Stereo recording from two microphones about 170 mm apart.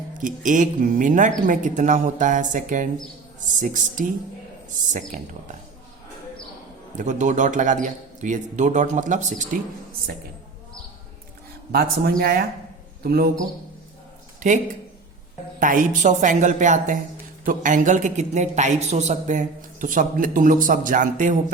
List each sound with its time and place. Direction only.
0.2 s a man's voice: 50° right (ahead or behind)
6.9 s a man's voice: 45° right (ahead or behind)
11.7 s a man's voice: 65° right (ahead or behind)
14.3 s speech: 45° right (ahead or behind)
15.6 s a man's voice: 50° right (ahead or behind)